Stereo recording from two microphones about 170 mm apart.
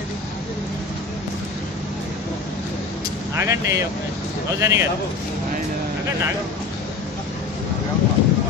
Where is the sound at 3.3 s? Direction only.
15° right (ahead or behind).